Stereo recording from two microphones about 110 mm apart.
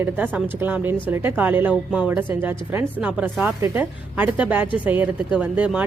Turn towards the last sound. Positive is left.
turn(degrees=-10)  # may be behind; listen again after turning